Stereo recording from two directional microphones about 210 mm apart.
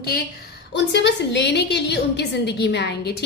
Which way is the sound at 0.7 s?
55° left (ahead or behind).